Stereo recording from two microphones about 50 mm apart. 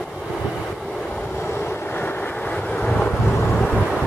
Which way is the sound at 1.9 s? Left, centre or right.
Left.